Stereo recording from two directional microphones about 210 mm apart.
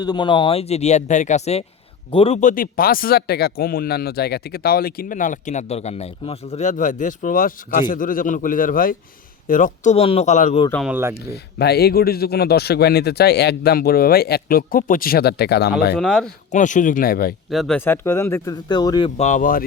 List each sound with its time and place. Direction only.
0.0 s speech: 20° left (ahead or behind)
10.7 s speech: 5° left (ahead or behind)
11.5 s speech: 50° left (ahead or behind)
16.0 s speech: 5° left (ahead or behind)
16.5 s speech: 35° left (ahead or behind)
17.5 s speech: centre (ahead or behind)
17.7 s speech: 10° left (ahead or behind); by 19.6 s 40° left (ahead or behind)